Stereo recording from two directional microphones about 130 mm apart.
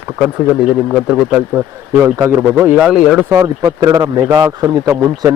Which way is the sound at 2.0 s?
20° right (ahead or behind).